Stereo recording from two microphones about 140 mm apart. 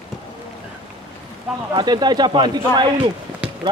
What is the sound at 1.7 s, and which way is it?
Speech, 35° right (ahead or behind).